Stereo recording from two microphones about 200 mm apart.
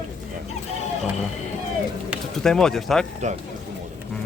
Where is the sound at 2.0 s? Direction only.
5° left (ahead or behind).